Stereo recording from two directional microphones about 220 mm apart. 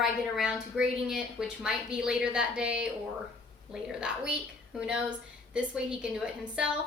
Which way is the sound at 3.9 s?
5° right (ahead or behind).